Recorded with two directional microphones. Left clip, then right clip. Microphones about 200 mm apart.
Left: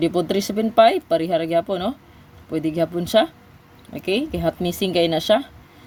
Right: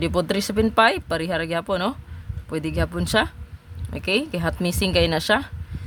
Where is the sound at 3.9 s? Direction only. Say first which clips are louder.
Even; 30° right (ahead or behind).